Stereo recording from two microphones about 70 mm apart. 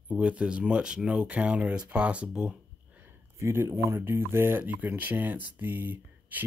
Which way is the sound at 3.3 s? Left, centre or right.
Right.